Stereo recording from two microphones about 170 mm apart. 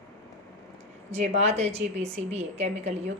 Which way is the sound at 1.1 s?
40° right (ahead or behind).